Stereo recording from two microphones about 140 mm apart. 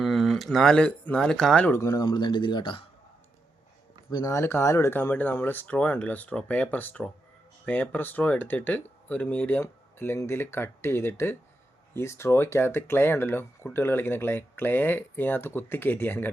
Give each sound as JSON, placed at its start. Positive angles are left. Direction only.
{"t": 0.0, "sound": "speech", "side_deg": 0}
{"t": 1.7, "sound": "speech", "side_deg": 20}
{"t": 2.0, "sound": "speech", "side_deg": 35}
{"t": 4.1, "sound": "speech", "side_deg": 25}